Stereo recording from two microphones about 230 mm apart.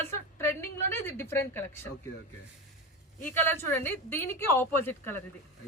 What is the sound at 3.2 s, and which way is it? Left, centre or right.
A woman's voice, centre.